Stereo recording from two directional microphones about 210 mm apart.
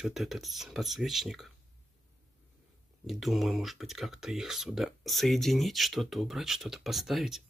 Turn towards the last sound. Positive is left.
turn(degrees=0)  # may be behind; listen again after turning